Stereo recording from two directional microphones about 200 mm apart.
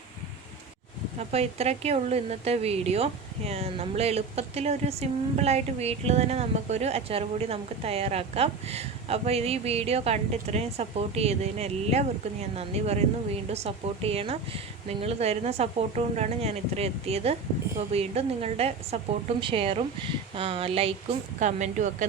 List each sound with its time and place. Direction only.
1.3 s speech: 30° right (ahead or behind)